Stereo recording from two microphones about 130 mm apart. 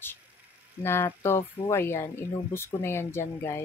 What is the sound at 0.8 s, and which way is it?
Speech, 20° left (ahead or behind).